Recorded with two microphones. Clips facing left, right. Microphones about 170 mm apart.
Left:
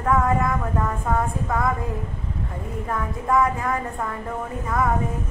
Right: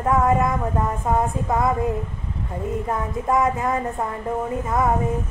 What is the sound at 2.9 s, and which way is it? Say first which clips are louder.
A woman's voice: left 1 dB; 25° right (ahead or behind).